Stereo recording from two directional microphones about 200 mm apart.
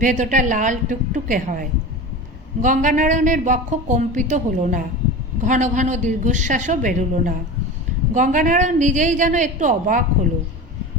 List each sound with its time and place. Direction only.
0.0 s a woman's voice: 40° right (ahead or behind)